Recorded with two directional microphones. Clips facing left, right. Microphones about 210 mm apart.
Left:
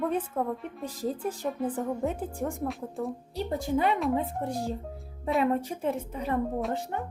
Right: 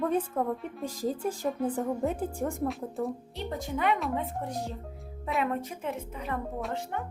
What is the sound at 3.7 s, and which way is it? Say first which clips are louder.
Speech: left 2 dB; 35° left (ahead or behind).